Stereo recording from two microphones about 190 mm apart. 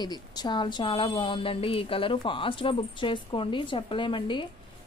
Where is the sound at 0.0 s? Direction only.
20° left (ahead or behind).